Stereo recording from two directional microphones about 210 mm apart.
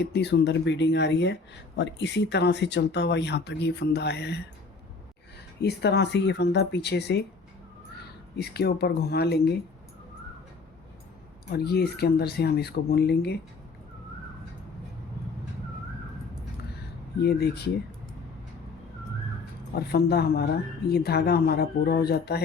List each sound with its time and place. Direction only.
0.0 s speech: 50° left (ahead or behind)
5.6 s speech: 50° left (ahead or behind)
11.5 s speech: 50° left (ahead or behind)
17.2 s speech: 50° left (ahead or behind)
19.7 s speech: 50° left (ahead or behind)